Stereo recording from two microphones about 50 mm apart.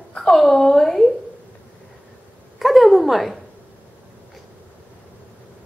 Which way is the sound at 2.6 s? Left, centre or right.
Centre.